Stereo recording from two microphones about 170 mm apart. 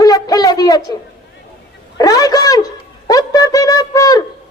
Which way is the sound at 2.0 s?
20° left (ahead or behind).